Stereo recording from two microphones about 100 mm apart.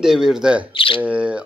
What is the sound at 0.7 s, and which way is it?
Speech, 65° left (ahead or behind).